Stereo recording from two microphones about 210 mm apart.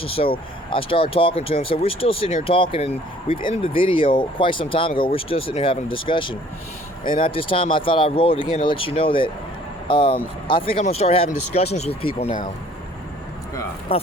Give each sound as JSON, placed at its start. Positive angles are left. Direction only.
{"t": 0.0, "sound": "speech", "side_deg": 25}
{"t": 13.9, "sound": "speech", "side_deg": 25}